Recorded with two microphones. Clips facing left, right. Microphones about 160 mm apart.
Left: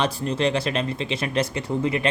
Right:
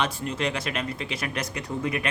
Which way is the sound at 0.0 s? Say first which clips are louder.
Left 5 dB; 30° left (ahead or behind).